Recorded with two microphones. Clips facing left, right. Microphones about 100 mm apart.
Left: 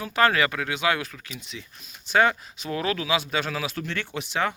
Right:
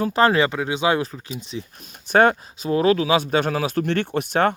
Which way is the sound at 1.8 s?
50° right (ahead or behind).